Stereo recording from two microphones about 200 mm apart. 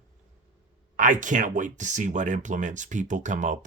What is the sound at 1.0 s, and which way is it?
Speech, 40° right (ahead or behind).